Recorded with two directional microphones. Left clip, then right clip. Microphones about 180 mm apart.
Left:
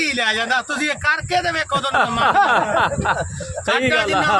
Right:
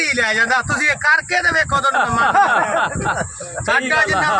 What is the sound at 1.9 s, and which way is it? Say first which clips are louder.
Speech: left 2 dB; 60° left (ahead or behind).